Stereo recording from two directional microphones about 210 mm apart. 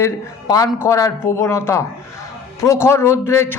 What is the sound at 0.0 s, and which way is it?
A man's voice, 15° left (ahead or behind).